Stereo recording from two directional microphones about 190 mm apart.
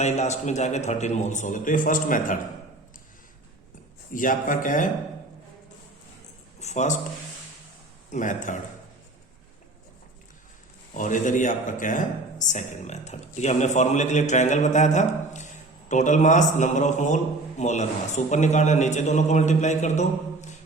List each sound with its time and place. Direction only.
0.0 s speech: 35° left (ahead or behind)
4.1 s speech: 45° left (ahead or behind)
6.6 s speech: 35° left (ahead or behind)
8.1 s speech: 40° left (ahead or behind)
10.9 s speech: 40° left (ahead or behind)